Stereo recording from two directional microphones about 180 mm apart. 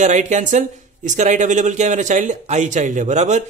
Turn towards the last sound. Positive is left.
turn(degrees=-40)  # may be behind; listen again after turning